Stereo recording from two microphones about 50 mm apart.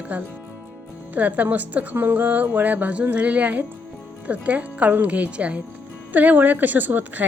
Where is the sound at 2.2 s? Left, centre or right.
Right.